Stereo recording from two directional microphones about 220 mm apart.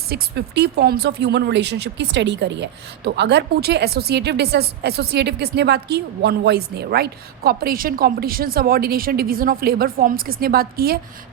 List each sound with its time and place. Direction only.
0.1 s speech: 45° right (ahead or behind)